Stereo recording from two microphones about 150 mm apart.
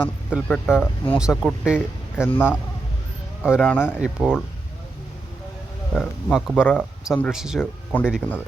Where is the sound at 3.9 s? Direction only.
5° right (ahead or behind).